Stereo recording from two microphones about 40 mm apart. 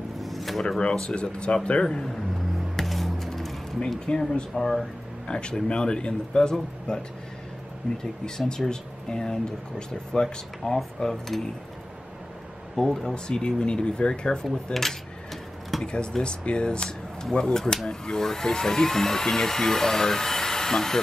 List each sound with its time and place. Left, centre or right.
0.2 s a sound: centre
0.7 s speech: left
2.7 s music: centre
4.0 s speech: centre
5.3 s speech: left
12.7 s speech: centre
14.4 s speech: centre
15.8 s speech: left